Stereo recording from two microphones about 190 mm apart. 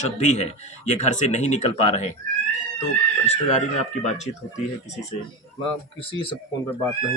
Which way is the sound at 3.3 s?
35° left (ahead or behind).